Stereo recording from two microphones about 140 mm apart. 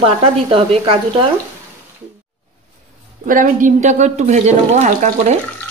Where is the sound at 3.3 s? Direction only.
70° right (ahead or behind).